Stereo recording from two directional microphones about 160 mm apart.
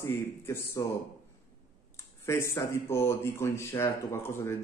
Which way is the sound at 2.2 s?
15° left (ahead or behind).